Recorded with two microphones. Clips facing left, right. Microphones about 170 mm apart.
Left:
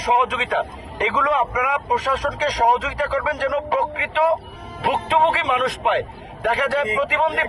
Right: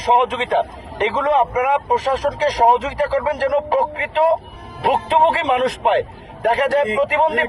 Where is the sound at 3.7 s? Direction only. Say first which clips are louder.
Right 3 dB; 45° right (ahead or behind).